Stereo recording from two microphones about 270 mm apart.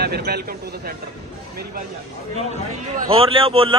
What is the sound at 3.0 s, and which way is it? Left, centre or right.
Speech, centre.